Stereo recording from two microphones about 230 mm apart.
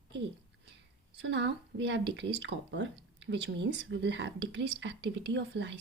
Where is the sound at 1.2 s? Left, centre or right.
Right.